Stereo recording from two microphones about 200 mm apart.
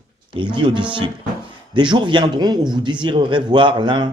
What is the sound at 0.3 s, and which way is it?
Speech, 25° right (ahead or behind).